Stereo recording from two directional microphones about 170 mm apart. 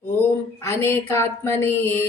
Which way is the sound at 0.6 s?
15° left (ahead or behind).